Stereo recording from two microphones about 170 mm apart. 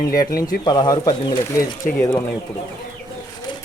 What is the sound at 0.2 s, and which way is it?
Speech, 20° left (ahead or behind).